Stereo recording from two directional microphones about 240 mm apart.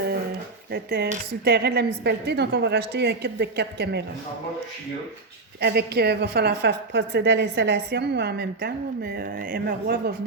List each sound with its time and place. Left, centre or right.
0.7 s a woman's voice: right
5.5 s a woman's voice: right